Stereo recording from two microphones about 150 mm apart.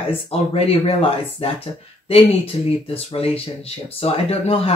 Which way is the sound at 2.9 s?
40° left (ahead or behind).